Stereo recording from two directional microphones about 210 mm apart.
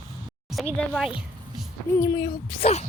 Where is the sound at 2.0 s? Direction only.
15° left (ahead or behind).